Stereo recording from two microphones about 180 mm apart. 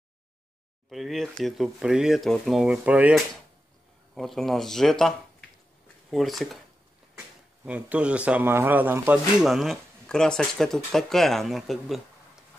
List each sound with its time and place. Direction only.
0.8 s speech: centre (ahead or behind)
7.6 s a man's voice: 5° right (ahead or behind)